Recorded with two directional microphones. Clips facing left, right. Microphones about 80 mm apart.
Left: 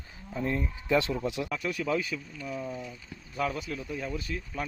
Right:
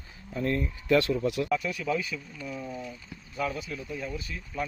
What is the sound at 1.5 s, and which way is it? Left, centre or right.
Speech, left.